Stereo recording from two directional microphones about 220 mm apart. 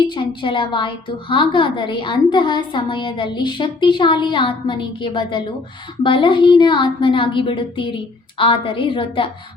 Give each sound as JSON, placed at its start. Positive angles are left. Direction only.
{"t": 0.0, "sound": "a woman's voice", "side_deg": 20}